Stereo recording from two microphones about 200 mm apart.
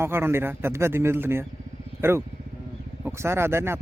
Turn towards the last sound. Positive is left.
turn(degrees=-10)  # may be behind; listen again after turning